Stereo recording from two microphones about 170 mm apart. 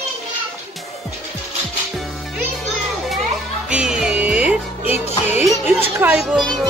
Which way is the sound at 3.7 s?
5° right (ahead or behind).